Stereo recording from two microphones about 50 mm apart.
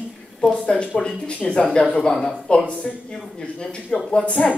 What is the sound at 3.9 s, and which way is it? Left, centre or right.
Speech, centre.